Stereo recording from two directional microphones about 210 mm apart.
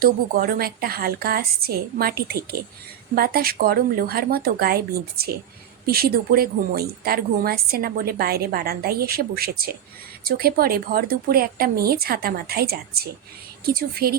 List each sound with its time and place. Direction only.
0.0 s a woman's voice: 45° right (ahead or behind)